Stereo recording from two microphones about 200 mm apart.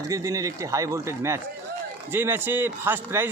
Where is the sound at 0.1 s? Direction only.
15° right (ahead or behind).